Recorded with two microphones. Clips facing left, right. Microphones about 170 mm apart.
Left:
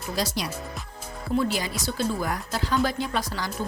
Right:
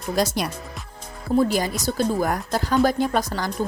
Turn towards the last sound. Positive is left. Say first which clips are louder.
# right 6 dB
turn(degrees=-45)  # may be behind; listen again after turning